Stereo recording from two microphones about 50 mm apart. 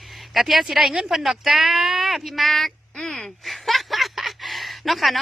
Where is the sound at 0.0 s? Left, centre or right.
Centre.